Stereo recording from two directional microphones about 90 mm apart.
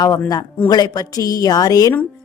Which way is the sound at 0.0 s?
45° left (ahead or behind).